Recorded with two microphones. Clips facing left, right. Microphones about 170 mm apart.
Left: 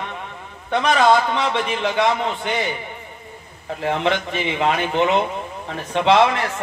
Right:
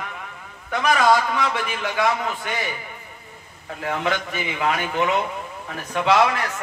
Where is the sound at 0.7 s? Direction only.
30° left (ahead or behind).